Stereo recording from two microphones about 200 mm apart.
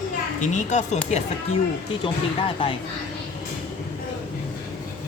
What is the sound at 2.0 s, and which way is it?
Speech, 25° left (ahead or behind).